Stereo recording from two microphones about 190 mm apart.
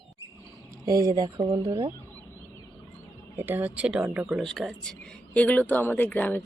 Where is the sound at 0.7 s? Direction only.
15° right (ahead or behind).